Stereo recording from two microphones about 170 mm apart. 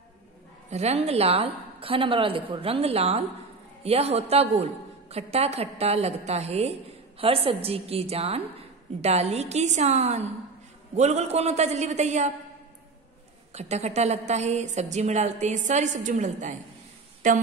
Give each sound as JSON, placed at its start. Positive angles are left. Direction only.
{"t": 0.7, "sound": "a woman's voice", "side_deg": -40}
{"t": 13.5, "sound": "a woman's voice", "side_deg": -40}